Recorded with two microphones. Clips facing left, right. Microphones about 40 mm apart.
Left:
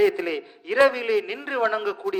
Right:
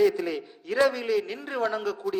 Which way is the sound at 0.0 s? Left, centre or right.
Left.